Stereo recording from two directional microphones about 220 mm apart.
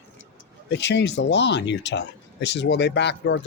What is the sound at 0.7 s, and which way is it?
Speech, 55° left (ahead or behind).